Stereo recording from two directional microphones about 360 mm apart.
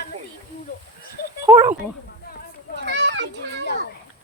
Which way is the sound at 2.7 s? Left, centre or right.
Right.